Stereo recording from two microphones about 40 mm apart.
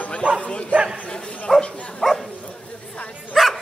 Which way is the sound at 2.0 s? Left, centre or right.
Centre.